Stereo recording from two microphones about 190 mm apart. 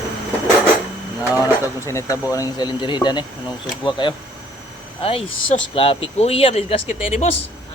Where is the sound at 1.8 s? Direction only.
15° left (ahead or behind); by 7.3 s 35° left (ahead or behind).